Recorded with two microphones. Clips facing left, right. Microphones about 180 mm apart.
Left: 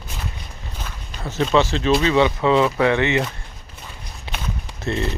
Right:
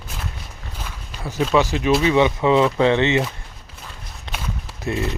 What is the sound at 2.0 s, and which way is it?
Speech, 15° right (ahead or behind).